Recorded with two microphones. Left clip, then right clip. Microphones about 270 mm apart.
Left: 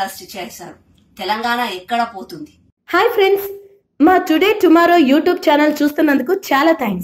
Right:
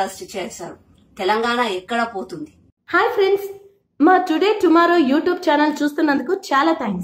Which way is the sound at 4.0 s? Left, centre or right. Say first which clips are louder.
Left 2 dB; centre.